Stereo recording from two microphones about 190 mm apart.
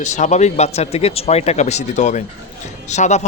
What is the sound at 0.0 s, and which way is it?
Speech, 40° left (ahead or behind).